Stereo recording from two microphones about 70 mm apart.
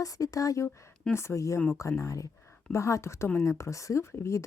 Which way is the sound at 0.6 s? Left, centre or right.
Left.